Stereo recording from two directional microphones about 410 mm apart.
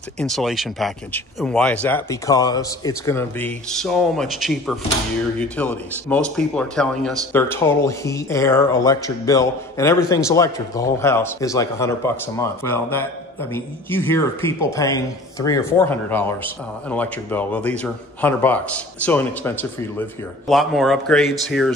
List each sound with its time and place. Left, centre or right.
0.2 s a man's voice: centre